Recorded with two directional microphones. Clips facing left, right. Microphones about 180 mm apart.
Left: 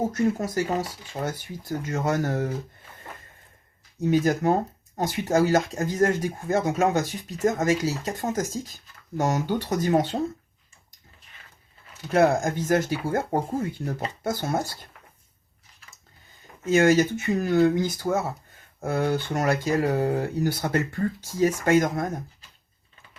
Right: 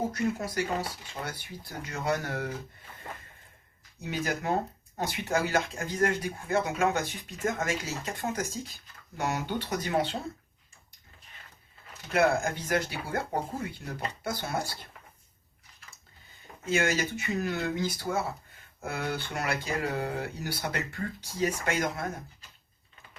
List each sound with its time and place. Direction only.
0.1 s speech: 45° left (ahead or behind)
4.0 s speech: 45° left (ahead or behind)
12.1 s speech: 40° left (ahead or behind)
16.6 s speech: 45° left (ahead or behind)